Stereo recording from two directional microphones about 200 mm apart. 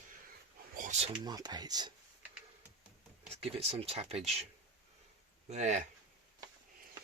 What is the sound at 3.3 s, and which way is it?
Speech, 30° right (ahead or behind).